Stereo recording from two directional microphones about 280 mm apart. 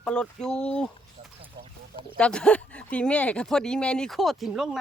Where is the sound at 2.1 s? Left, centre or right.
Centre.